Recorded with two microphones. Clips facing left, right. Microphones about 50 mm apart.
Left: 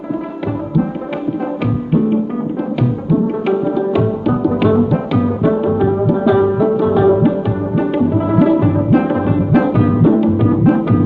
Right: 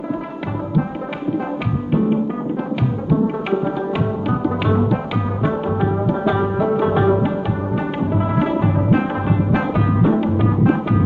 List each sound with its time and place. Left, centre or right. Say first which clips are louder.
3.1 s music: left 3 dB; centre
6.7 s music: left 4 dB; right
7.2 s music: left 5 dB; centre